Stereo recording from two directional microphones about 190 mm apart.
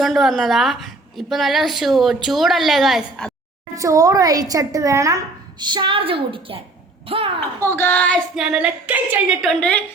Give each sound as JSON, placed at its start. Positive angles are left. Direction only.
{"t": 0.0, "sound": "a woman's voice", "side_deg": 0}
{"t": 3.8, "sound": "a woman's voice", "side_deg": -15}
{"t": 7.6, "sound": "a woman's voice", "side_deg": 10}
{"t": 9.6, "sound": "a woman's voice", "side_deg": 5}